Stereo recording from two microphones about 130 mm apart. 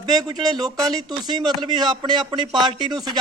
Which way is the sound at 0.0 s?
30° right (ahead or behind).